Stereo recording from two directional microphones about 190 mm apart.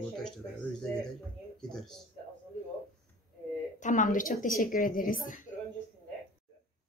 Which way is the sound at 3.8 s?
40° left (ahead or behind).